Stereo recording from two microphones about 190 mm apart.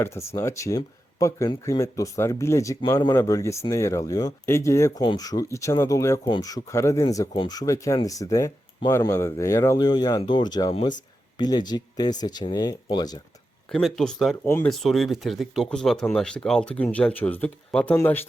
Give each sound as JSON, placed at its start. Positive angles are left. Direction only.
{"t": 0.0, "sound": "speech", "side_deg": 15}
{"t": 13.7, "sound": "speech", "side_deg": 5}
{"t": 14.4, "sound": "speech", "side_deg": 15}
{"t": 14.7, "sound": "speech", "side_deg": 0}